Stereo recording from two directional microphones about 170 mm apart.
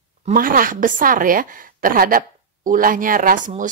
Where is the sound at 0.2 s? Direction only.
55° right (ahead or behind).